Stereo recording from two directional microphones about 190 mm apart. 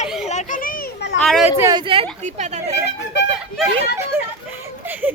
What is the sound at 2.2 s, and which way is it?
Speech, 35° right (ahead or behind).